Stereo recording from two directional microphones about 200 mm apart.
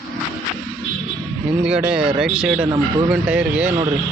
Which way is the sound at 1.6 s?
5° right (ahead or behind).